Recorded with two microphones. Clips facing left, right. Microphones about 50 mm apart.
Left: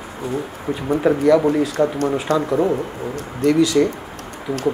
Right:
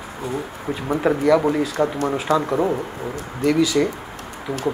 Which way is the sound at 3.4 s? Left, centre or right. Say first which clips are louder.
Left 3 dB; centre.